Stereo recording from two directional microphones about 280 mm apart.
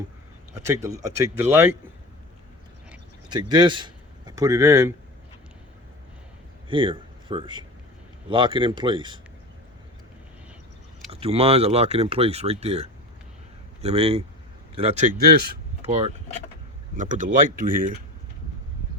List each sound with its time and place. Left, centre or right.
0.6 s speech: centre
3.2 s speech: centre
6.7 s a man's voice: centre
11.1 s speech: right
15.9 s speech: right